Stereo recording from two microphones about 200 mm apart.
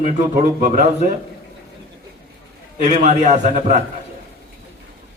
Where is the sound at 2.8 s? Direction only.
35° right (ahead or behind).